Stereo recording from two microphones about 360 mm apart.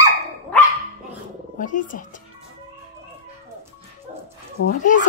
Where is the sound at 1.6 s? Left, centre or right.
Left.